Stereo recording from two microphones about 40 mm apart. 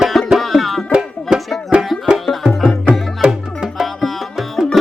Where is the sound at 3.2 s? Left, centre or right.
Centre.